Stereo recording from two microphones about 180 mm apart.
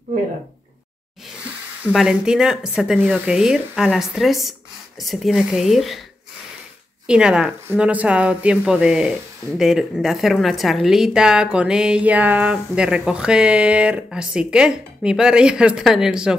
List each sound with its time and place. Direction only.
1.9 s a woman's voice: centre (ahead or behind)
7.1 s a woman's voice: 5° right (ahead or behind)